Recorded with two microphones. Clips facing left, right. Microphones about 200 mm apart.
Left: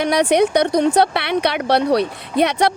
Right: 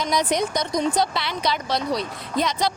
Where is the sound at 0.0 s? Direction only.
65° left (ahead or behind).